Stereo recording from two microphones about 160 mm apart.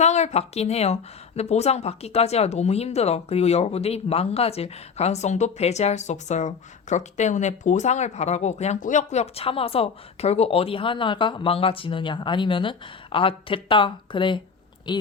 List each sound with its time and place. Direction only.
0.0 s speech: 45° left (ahead or behind); by 15.0 s 25° left (ahead or behind)